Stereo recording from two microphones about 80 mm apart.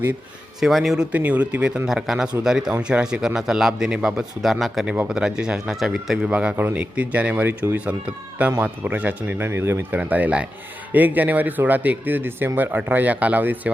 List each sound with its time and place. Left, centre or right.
0.6 s a man's voice: centre
0.9 s speech: centre
1.9 s speech: centre
7.4 s speech: right
7.9 s speech: centre
9.5 s speech: right
10.0 s speech: centre